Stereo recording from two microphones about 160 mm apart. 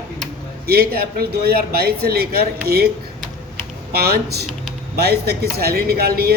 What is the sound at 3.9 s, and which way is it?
Speech, 75° right (ahead or behind).